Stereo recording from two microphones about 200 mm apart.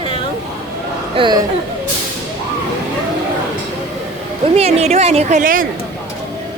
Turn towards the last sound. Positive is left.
turn(degrees=-45)  # may be behind; listen again after turning